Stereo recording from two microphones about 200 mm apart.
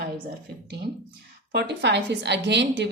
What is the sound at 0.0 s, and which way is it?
A woman's voice, 50° right (ahead or behind).